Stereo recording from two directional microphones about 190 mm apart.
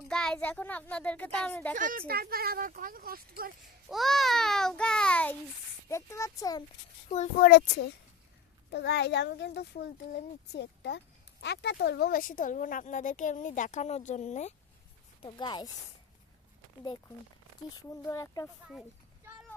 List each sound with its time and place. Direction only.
0.1 s a child's voice: 5° left (ahead or behind)
1.7 s speech: 45° right (ahead or behind)
3.8 s a child's voice: centre (ahead or behind); by 6.7 s 20° left (ahead or behind)
7.1 s a child's voice: 35° left (ahead or behind)
7.4 s a child's voice: 60° left (ahead or behind); by 14.5 s 40° left (ahead or behind)
15.2 s speech: 25° left (ahead or behind)
17.7 s a child's voice: 15° left (ahead or behind)